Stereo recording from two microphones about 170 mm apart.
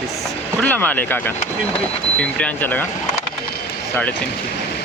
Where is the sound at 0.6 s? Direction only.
10° left (ahead or behind).